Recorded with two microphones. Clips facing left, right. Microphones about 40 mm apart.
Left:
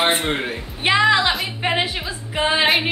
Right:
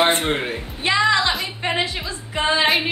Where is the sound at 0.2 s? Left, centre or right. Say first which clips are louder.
Even; centre.